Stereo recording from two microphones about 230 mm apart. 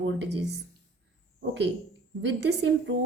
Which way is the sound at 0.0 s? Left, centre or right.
Right.